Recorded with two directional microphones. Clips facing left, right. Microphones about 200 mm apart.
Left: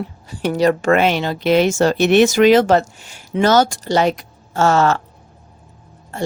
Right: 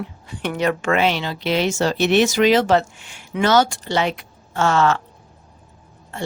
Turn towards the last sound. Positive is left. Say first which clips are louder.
# left 5 dB
turn(degrees=40)  # may be behind; listen again after turning